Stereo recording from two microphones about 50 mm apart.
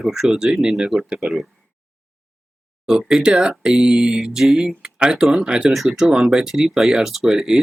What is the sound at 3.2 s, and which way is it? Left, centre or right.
Speech, centre.